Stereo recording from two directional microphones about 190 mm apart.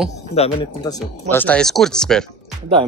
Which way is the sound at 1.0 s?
10° left (ahead or behind).